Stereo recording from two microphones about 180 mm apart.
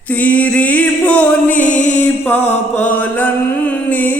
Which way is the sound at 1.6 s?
45° left (ahead or behind).